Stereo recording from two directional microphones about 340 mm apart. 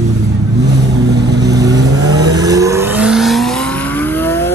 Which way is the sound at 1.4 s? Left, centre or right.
Centre.